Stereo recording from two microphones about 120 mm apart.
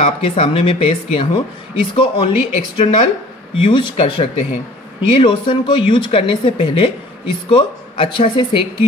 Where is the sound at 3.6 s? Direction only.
40° left (ahead or behind).